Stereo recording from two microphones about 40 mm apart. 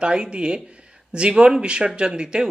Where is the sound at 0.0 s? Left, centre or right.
Right.